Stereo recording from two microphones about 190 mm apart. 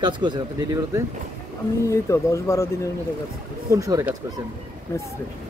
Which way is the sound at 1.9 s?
15° left (ahead or behind).